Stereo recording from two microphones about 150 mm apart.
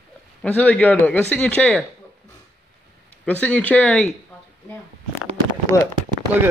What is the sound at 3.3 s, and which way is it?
Speech, 10° left (ahead or behind).